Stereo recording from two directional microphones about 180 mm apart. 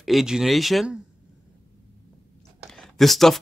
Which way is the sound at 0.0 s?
Centre (ahead or behind).